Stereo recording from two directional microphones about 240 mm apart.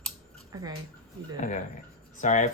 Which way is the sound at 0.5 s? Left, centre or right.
Centre.